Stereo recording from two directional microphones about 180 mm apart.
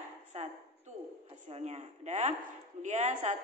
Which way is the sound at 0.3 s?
35° right (ahead or behind).